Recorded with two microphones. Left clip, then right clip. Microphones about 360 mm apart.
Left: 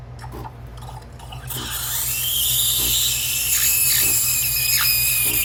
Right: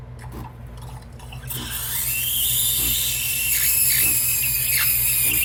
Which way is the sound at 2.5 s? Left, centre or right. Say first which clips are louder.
Left 4 dB; centre.